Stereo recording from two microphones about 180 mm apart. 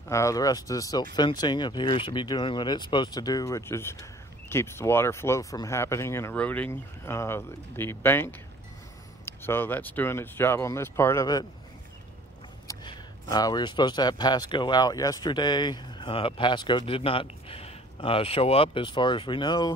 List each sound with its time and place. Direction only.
0.1 s speech: 15° left (ahead or behind)
12.6 s speech: 20° left (ahead or behind)